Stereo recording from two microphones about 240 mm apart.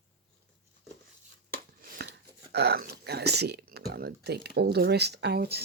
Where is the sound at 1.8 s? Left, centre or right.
Right.